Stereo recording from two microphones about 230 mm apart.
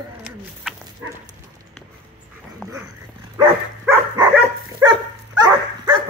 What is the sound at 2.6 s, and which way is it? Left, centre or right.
Dog, centre.